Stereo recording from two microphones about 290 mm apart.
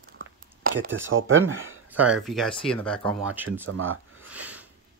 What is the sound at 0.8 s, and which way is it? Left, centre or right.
Speech, right.